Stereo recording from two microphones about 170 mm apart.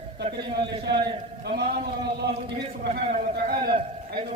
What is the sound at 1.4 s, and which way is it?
Speech, 65° right (ahead or behind).